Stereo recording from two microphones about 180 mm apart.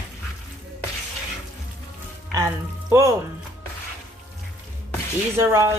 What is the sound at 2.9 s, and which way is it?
Speech, 15° right (ahead or behind).